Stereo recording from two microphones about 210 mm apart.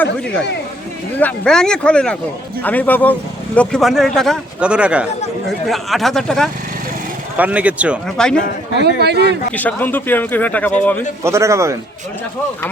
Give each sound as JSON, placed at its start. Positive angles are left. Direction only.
{"t": 1.2, "sound": "speech", "side_deg": 5}
{"t": 8.8, "sound": "a man's voice", "side_deg": -50}
{"t": 9.6, "sound": "speech", "side_deg": 10}
{"t": 11.2, "sound": "speech", "side_deg": -15}